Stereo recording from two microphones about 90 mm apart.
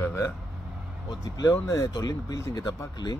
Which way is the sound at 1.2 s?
45° left (ahead or behind).